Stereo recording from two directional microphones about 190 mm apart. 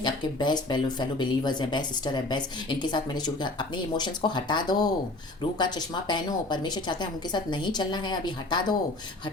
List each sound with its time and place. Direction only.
0.0 s speech: 20° left (ahead or behind)